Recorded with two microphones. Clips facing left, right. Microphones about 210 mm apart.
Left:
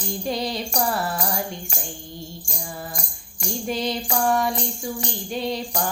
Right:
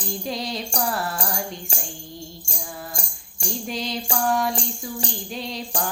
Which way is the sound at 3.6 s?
Centre (ahead or behind).